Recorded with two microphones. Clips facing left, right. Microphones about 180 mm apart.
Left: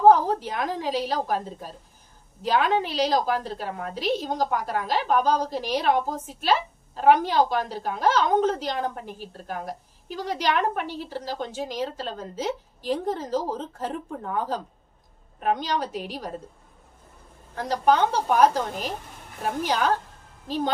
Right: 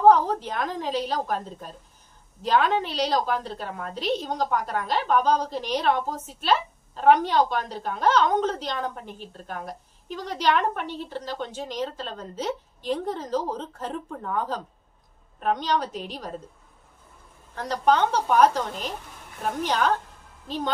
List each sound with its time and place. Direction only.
0.0 s a woman's voice: 10° left (ahead or behind)
17.6 s a woman's voice: 10° left (ahead or behind)